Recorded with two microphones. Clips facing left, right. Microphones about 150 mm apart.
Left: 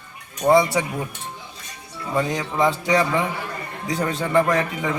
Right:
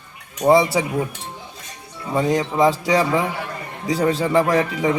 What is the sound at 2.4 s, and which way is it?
Speech, 35° right (ahead or behind).